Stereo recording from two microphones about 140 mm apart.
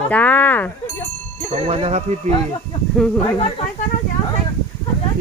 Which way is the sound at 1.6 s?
45° right (ahead or behind).